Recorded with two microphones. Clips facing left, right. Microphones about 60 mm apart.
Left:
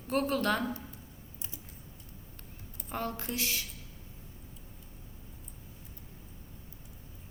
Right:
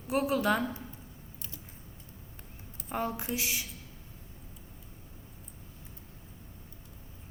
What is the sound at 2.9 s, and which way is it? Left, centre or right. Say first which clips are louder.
Speech: right 2 dB; centre.